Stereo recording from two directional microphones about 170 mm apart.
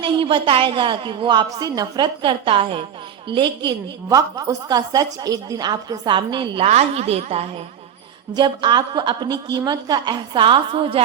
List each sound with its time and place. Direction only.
0.0 s a woman's voice: 30° right (ahead or behind)
8.3 s a woman's voice: 25° right (ahead or behind)